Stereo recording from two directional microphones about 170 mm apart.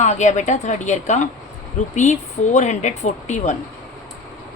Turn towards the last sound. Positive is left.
turn(degrees=45)  # may be behind; listen again after turning